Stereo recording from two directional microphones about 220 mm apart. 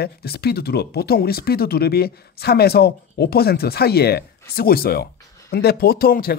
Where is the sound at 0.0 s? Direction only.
45° left (ahead or behind).